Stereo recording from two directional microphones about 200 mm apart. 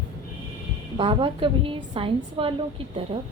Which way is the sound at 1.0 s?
25° right (ahead or behind).